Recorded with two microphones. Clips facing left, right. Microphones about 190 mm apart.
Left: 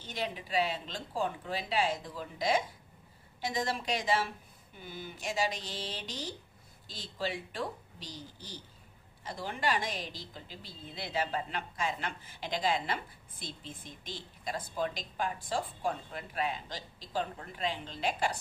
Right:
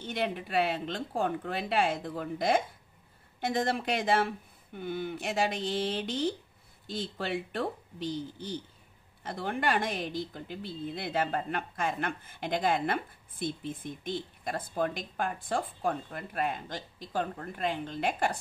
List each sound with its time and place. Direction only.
0.0 s a woman's voice: 55° right (ahead or behind)